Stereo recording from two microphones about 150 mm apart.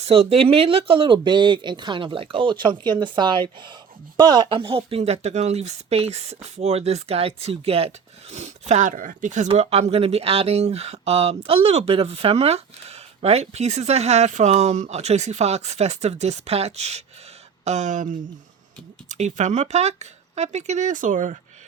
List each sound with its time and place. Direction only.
0.0 s speech: 40° right (ahead or behind)
9.5 s speech: 40° right (ahead or behind); by 21.3 s 60° right (ahead or behind)